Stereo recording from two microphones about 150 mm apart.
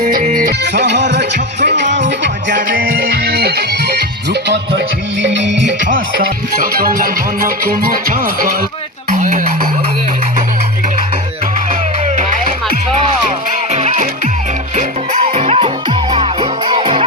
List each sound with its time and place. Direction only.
0.0 s music: 65° right (ahead or behind)
2.6 s music: 75° right (ahead or behind); by 3.9 s 90° right
5.8 s music: 70° right (ahead or behind)
9.0 s a sound: 60° right (ahead or behind)
12.1 s music: 55° right (ahead or behind)
15.2 s music: 40° right (ahead or behind)